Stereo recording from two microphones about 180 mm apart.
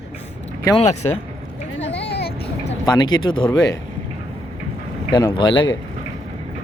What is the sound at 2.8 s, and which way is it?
Speech, 20° left (ahead or behind).